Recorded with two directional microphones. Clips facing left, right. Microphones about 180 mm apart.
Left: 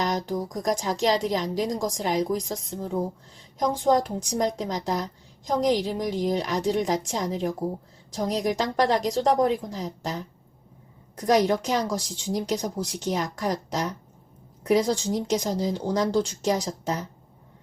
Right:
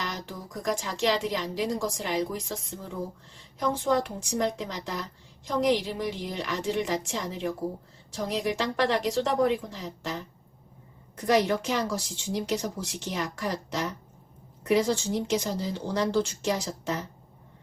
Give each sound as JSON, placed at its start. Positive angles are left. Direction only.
{"t": 0.0, "sound": "speech", "side_deg": 40}
{"t": 11.3, "sound": "speech", "side_deg": 40}